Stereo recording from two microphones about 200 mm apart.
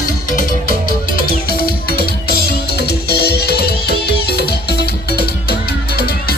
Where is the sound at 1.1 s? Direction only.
50° left (ahead or behind).